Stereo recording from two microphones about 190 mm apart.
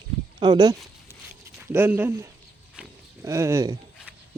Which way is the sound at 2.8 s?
5° right (ahead or behind).